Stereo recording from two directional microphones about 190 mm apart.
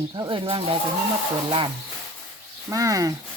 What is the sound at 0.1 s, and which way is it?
Speech, 25° right (ahead or behind).